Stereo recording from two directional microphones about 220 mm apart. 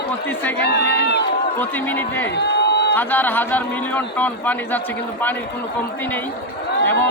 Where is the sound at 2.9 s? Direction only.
10° left (ahead or behind).